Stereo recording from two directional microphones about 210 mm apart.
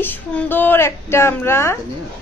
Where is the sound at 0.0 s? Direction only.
10° left (ahead or behind).